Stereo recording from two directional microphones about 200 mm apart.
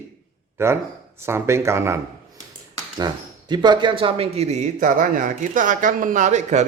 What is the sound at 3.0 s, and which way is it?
Speech, 20° right (ahead or behind).